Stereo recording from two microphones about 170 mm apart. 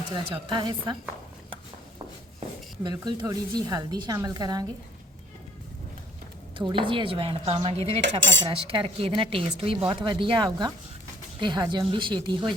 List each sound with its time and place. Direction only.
0.1 s a woman's voice: 25° right (ahead or behind)
2.8 s a woman's voice: 25° right (ahead or behind)
6.6 s speech: 30° right (ahead or behind)
8.2 s cutlery: 90° right
8.4 s a woman's voice: 30° right (ahead or behind)